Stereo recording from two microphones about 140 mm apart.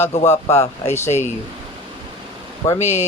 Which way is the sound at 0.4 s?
20° left (ahead or behind).